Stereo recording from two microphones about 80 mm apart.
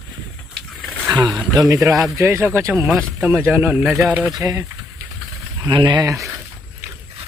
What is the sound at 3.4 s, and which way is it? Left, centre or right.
Speech, right.